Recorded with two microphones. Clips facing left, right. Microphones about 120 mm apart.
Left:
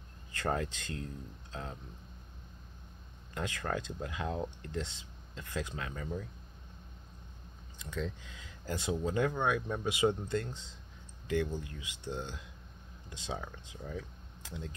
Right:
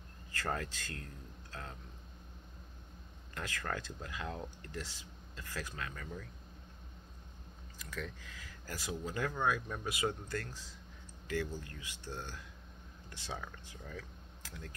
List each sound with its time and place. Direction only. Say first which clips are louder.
0.3 s speech: left 4 dB; 20° left (ahead or behind)
3.3 s speech: left 4 dB; 15° left (ahead or behind)
7.7 s speech: left 6 dB; 20° left (ahead or behind)